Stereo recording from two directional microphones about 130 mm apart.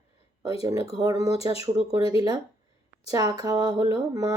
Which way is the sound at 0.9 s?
30° right (ahead or behind).